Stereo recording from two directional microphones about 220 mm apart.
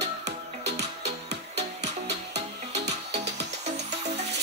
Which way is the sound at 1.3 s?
30° right (ahead or behind).